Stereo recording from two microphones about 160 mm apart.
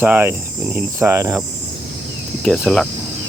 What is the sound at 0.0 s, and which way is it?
Cricket, 10° right (ahead or behind).